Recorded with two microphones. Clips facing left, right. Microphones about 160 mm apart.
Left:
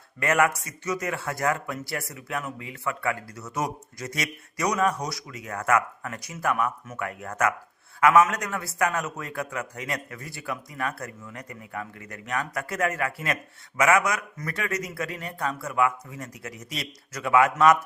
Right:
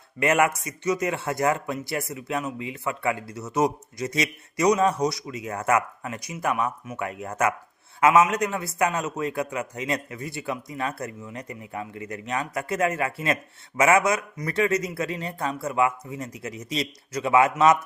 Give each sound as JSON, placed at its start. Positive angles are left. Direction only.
{"t": 0.2, "sound": "a man's voice", "side_deg": -20}